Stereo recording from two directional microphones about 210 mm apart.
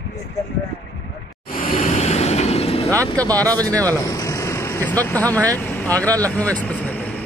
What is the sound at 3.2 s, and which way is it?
Speech, 15° right (ahead or behind).